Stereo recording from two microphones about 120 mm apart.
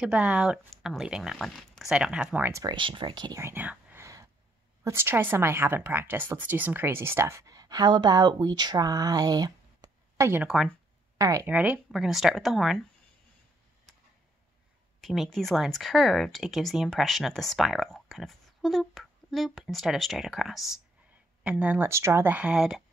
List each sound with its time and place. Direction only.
0.0 s speech: 10° right (ahead or behind)
2.3 s speech: 15° right (ahead or behind)
2.6 s speech: 40° right (ahead or behind)
3.3 s whispering: 20° right (ahead or behind)
4.8 s speech: 20° right (ahead or behind)
10.4 s speech: 5° right (ahead or behind)
11.1 s speech: 25° right (ahead or behind)
11.4 s speech: 15° right (ahead or behind)
15.0 s speech: centre (ahead or behind)